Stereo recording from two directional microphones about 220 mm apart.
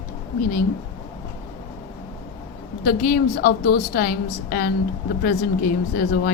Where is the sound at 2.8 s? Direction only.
45° left (ahead or behind).